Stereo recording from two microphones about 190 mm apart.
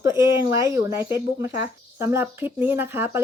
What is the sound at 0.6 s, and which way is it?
Speech, 15° right (ahead or behind).